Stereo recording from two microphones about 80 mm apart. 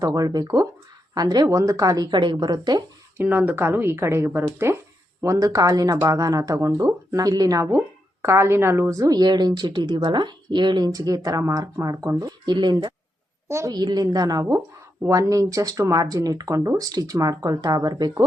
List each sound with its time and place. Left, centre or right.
0.0 s a woman's voice: right
1.5 s a woman's voice: right
3.2 s speech: right
5.2 s a woman's voice: right
7.7 s a woman's voice: right
13.5 s a woman's voice: right
13.7 s a woman's voice: right